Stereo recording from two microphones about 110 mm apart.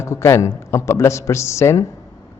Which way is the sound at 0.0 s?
25° left (ahead or behind).